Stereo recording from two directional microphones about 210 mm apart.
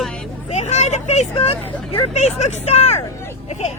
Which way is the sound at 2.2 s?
30° left (ahead or behind).